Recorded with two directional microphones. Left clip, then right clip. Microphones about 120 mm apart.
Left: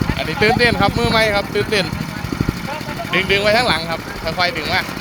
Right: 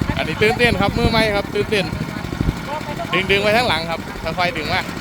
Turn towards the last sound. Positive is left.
turn(degrees=-40)  # may be behind; listen again after turning